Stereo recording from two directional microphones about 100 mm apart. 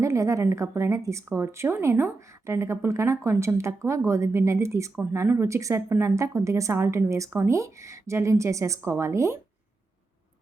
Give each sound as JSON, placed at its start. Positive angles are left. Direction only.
{"t": 0.0, "sound": "a woman's voice", "side_deg": -30}